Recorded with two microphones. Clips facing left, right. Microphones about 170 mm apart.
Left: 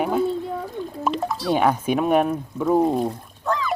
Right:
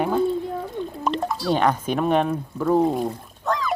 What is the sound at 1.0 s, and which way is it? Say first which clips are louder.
Drip: left 1 dB; centre (ahead or behind).